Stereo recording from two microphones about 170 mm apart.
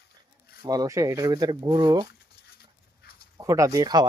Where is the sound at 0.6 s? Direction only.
20° right (ahead or behind).